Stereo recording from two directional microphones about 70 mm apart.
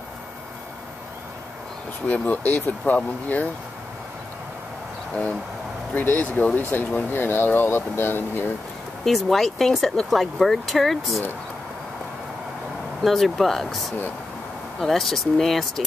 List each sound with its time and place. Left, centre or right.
2.0 s speech: left
5.9 s speech: left
9.0 s speech: centre
13.0 s speech: centre